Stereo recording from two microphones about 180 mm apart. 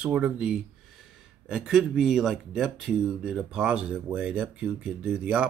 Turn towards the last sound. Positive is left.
turn(degrees=-5)  # may be behind; listen again after turning